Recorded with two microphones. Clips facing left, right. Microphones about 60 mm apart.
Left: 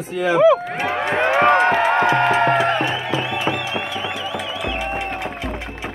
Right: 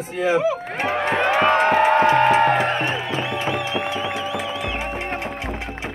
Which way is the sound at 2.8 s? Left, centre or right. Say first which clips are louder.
Left 2 dB; right.